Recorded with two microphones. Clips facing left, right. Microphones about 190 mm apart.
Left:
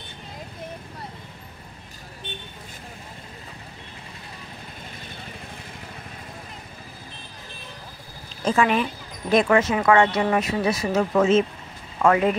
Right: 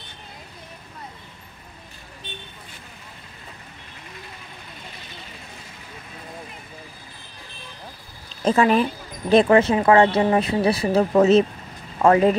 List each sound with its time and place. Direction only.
8.5 s speech: 35° right (ahead or behind)